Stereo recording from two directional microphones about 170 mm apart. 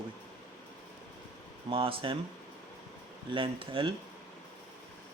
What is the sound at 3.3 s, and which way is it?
Speech, 30° right (ahead or behind).